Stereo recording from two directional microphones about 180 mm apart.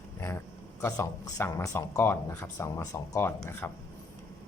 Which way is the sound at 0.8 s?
15° left (ahead or behind).